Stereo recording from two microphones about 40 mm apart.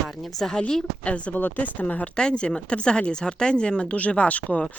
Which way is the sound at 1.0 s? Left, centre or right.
Left.